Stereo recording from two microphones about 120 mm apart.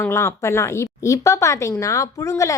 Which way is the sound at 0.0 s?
25° left (ahead or behind).